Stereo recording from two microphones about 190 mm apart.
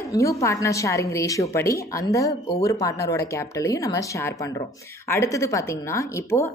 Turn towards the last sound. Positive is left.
turn(degrees=15)  # may be behind; listen again after turning